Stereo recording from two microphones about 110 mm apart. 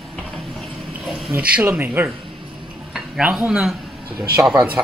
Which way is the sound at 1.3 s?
15° right (ahead or behind).